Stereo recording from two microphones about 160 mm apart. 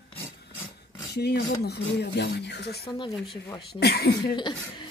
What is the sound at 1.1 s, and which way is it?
Speech, 90° left.